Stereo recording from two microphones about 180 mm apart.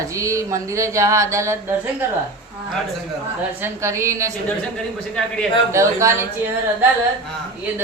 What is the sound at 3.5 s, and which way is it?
Speech, 15° right (ahead or behind).